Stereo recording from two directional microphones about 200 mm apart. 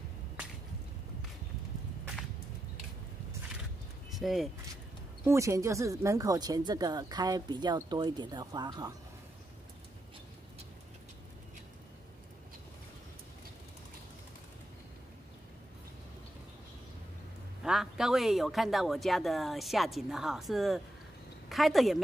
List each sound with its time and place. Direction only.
4.1 s speech: centre (ahead or behind)
5.2 s speech: 15° right (ahead or behind)
17.6 s speech: centre (ahead or behind)